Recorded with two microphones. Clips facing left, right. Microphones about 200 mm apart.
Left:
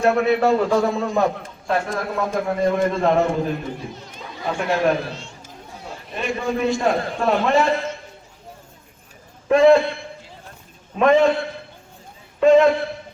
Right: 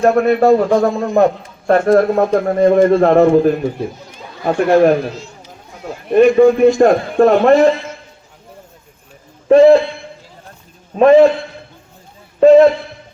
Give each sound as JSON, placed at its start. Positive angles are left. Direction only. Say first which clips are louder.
{"t": 0.0, "sound": "a man's voice", "louder": "right 6 dB", "side_deg": -50}
{"t": 6.1, "sound": "a man's voice", "louder": "right 17 dB", "side_deg": -55}
{"t": 9.5, "sound": "a man's voice", "louder": "right 6 dB", "side_deg": -35}
{"t": 10.9, "sound": "a man's voice", "louder": "right 7 dB", "side_deg": -35}
{"t": 12.4, "sound": "a man's voice", "louder": "right 7 dB", "side_deg": -35}